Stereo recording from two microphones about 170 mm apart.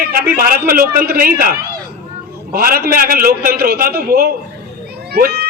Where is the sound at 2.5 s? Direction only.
60° right (ahead or behind).